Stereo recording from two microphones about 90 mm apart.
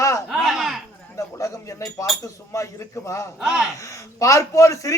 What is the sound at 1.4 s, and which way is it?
A man's voice, 40° left (ahead or behind).